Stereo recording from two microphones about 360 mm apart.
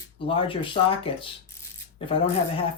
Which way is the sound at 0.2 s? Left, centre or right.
Centre.